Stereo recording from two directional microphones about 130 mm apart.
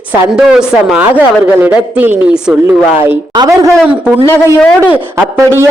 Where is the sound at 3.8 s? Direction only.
10° right (ahead or behind).